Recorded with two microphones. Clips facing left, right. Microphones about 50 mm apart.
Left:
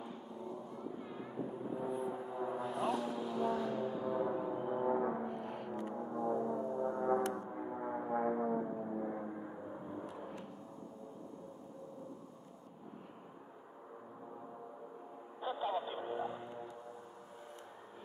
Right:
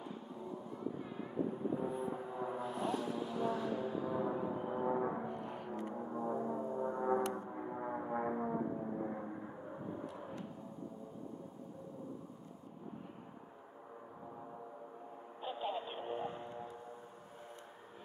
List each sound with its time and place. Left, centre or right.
0.0 s a sound: centre
2.1 s music: centre
2.6 s music: left
2.9 s a sound: centre
6.1 s music: centre
7.4 s music: centre
16.0 s vehicle: right